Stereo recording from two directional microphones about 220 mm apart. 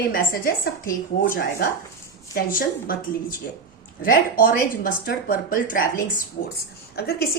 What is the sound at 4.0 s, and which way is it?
A woman's voice, 40° left (ahead or behind).